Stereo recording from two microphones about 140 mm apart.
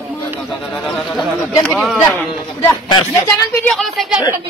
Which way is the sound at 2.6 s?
30° left (ahead or behind).